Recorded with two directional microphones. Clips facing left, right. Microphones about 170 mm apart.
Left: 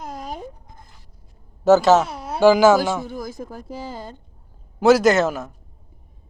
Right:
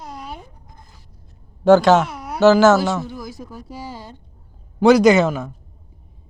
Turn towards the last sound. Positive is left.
turn(degrees=5)  # may be behind; listen again after turning